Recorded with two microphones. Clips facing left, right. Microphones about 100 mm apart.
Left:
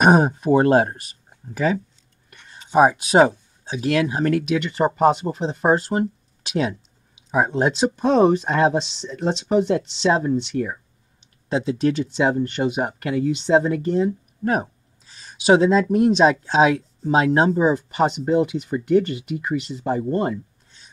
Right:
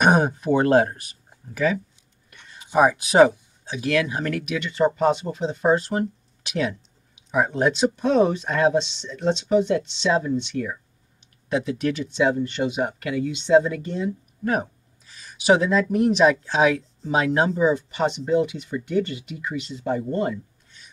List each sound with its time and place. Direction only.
0.0 s speech: 30° left (ahead or behind)
4.6 s speech: 45° left (ahead or behind); by 17.5 s 30° left (ahead or behind)
17.5 s speech: 40° left (ahead or behind)